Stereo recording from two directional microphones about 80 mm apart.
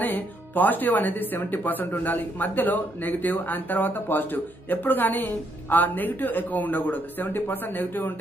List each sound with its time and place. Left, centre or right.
0.0 s speech: left